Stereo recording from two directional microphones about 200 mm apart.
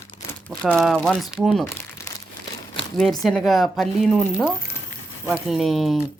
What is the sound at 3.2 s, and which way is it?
A man's voice, centre (ahead or behind).